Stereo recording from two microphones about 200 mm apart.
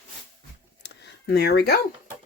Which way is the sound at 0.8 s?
55° left (ahead or behind).